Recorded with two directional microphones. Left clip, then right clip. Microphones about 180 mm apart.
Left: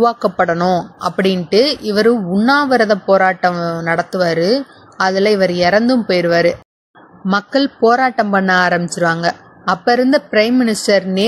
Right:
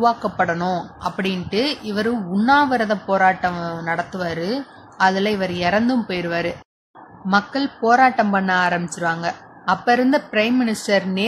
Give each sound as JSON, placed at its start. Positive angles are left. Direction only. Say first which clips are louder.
{"t": 0.0, "sound": "speech", "louder": "left 5 dB", "side_deg": 40}